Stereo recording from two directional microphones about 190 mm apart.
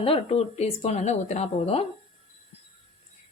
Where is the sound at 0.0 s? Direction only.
30° left (ahead or behind).